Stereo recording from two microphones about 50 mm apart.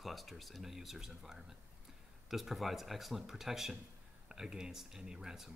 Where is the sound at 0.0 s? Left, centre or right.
Centre.